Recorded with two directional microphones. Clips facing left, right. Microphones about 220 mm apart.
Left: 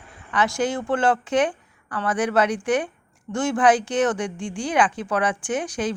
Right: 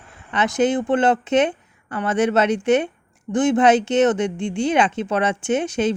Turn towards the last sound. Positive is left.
turn(degrees=-25)  # may be behind; listen again after turning